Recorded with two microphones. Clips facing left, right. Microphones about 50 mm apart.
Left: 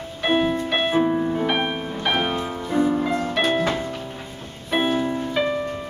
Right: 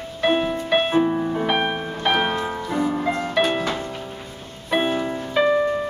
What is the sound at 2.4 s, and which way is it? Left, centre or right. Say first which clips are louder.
Music: left 1 dB; centre.